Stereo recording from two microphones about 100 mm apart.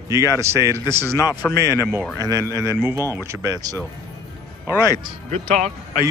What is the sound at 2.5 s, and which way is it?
Speech, 30° right (ahead or behind).